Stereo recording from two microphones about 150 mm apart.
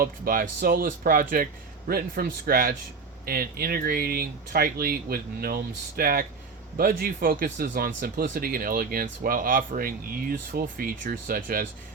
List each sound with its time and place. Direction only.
0.0 s speech: 70° right (ahead or behind)
1.9 s a man's voice: 80° right